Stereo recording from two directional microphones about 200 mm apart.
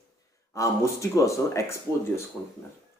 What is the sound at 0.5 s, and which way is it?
Speech, 15° left (ahead or behind).